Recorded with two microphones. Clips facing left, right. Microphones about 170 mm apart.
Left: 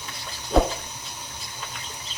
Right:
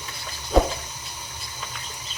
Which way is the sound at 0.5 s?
Centre (ahead or behind).